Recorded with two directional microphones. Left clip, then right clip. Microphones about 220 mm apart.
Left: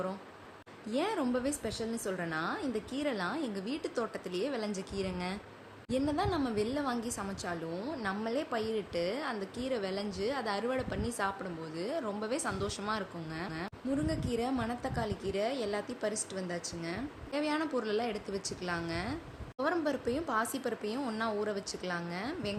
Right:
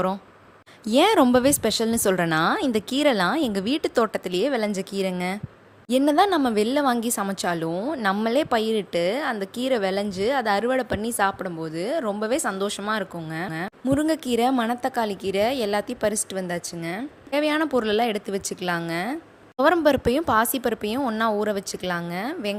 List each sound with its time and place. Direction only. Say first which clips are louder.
0.9 s a woman's voice: right 16 dB; 50° right (ahead or behind)